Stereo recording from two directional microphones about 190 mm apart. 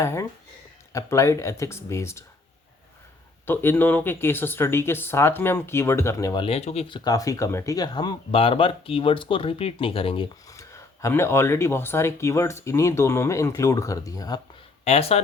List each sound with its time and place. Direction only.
0.0 s speech: 15° left (ahead or behind)
3.4 s speech: 10° left (ahead or behind); by 10.2 s 30° left (ahead or behind)
10.5 s speech: 15° left (ahead or behind)
14.8 s speech: 35° left (ahead or behind)